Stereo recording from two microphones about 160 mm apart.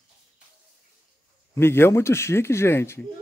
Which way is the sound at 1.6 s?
15° left (ahead or behind).